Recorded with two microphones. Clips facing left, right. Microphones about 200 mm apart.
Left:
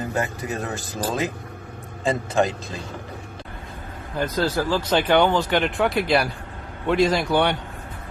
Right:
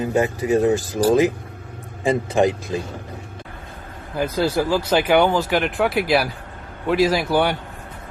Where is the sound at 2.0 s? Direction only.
15° right (ahead or behind).